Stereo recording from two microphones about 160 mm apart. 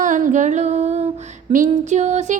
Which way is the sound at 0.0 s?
55° right (ahead or behind).